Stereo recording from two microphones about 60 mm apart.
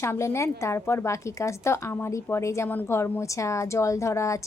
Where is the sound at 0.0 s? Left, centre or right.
Left.